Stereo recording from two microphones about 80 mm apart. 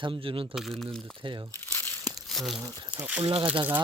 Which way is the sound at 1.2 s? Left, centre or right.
Right.